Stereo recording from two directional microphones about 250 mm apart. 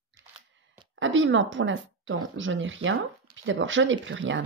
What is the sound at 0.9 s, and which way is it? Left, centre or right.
Speech, right.